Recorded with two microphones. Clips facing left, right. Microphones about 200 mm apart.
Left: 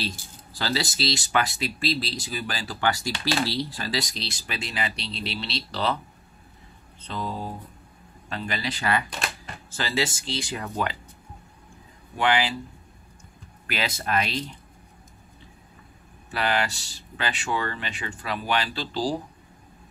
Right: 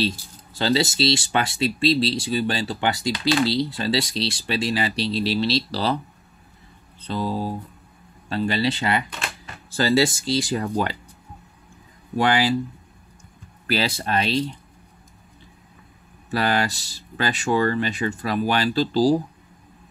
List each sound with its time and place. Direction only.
0.5 s speech: 25° right (ahead or behind)
7.0 s speech: 35° right (ahead or behind)
9.8 s speech: 40° right (ahead or behind)
12.2 s speech: 40° right (ahead or behind)
13.7 s speech: 35° right (ahead or behind)
16.3 s speech: 40° right (ahead or behind)